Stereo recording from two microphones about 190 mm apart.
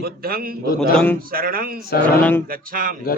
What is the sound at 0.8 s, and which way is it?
Speech, 5° left (ahead or behind).